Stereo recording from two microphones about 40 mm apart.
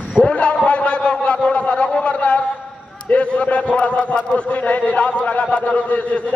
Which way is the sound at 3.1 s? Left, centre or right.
Left.